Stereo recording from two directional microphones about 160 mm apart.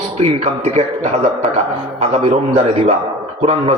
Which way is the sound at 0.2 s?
40° right (ahead or behind).